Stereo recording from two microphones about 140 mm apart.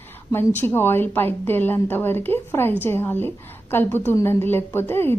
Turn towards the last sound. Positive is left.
turn(degrees=15)  # may be behind; listen again after turning